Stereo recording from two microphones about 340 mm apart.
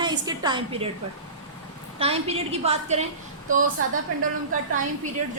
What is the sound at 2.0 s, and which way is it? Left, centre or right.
A woman's voice, centre.